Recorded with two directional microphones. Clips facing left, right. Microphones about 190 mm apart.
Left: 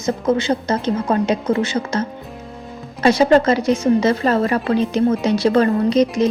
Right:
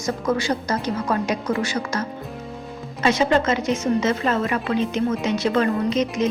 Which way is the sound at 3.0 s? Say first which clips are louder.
Left 6 dB; 35° left (ahead or behind).